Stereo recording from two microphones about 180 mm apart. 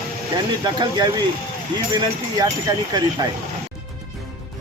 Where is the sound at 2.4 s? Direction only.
20° right (ahead or behind).